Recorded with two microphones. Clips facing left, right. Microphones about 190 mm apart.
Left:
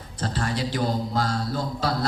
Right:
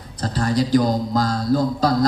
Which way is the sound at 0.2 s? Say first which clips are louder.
Right 7 dB; 40° right (ahead or behind).